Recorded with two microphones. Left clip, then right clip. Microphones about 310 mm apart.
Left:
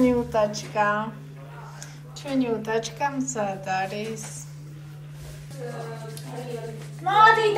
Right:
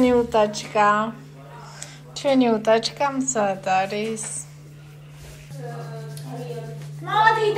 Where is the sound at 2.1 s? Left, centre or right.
Centre.